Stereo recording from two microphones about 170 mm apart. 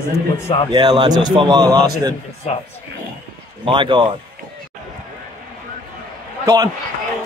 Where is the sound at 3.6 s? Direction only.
30° right (ahead or behind).